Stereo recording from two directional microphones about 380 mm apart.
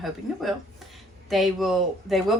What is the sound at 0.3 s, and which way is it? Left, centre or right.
Speech, centre.